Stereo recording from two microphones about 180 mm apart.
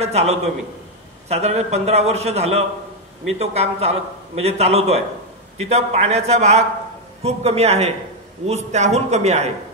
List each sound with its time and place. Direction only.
0.0 s a man's voice: 35° right (ahead or behind)